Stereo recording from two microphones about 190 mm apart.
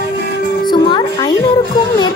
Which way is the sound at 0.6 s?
25° left (ahead or behind).